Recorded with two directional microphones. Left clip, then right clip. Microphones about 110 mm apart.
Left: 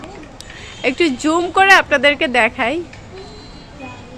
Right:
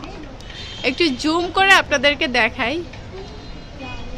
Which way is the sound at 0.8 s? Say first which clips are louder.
Left 3 dB; 55° left (ahead or behind).